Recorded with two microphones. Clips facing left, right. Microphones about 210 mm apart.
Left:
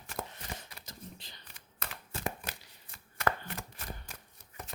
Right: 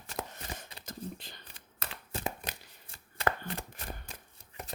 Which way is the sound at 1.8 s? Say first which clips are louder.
Right 2 dB; 25° right (ahead or behind).